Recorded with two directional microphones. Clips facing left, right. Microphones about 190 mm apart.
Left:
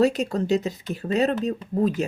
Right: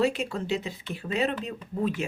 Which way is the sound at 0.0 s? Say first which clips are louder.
Left 5 dB; 40° left (ahead or behind).